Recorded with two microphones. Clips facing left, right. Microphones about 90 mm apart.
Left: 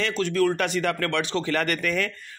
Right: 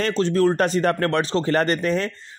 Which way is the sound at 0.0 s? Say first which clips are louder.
Right 4 dB; 30° right (ahead or behind).